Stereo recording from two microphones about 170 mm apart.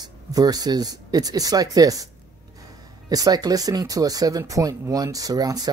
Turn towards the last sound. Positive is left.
turn(degrees=-20)  # may be behind; listen again after turning